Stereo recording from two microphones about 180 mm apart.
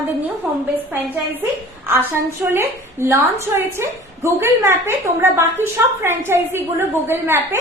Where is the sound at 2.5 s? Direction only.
15° right (ahead or behind).